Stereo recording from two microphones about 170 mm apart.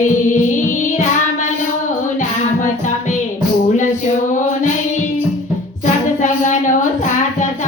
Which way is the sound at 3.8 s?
50° left (ahead or behind).